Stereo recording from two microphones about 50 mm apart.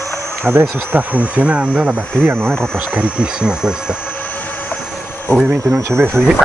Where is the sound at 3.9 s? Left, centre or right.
Left.